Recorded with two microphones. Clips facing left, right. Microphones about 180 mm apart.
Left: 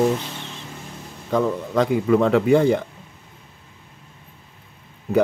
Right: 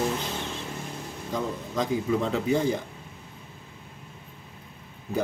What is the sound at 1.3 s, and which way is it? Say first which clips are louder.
Speech: left 9 dB; 65° left (ahead or behind).